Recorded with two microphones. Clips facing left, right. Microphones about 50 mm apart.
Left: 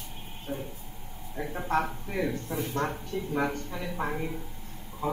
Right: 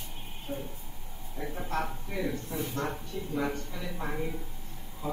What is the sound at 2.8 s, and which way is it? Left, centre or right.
A man's voice, left.